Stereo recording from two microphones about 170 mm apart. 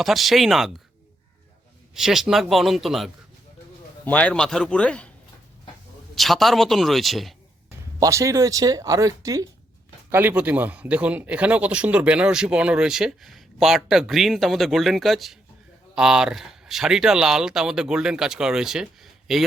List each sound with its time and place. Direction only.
0.0 s speech: centre (ahead or behind)
2.0 s a man's voice: centre (ahead or behind)
6.1 s speech: centre (ahead or behind)
7.9 s speech: 20° right (ahead or behind); by 19.5 s centre (ahead or behind)